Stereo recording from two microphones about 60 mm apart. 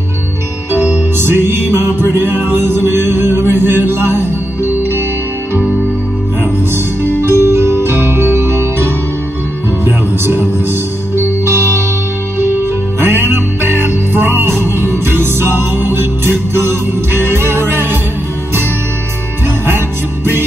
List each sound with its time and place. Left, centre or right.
0.8 s music: right
7.3 s music: right
9.8 s music: right
13.0 s music: right